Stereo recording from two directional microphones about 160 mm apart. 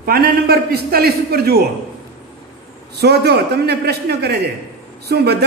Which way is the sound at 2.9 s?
90° right.